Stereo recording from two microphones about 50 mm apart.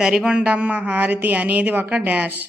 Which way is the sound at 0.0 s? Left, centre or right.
Centre.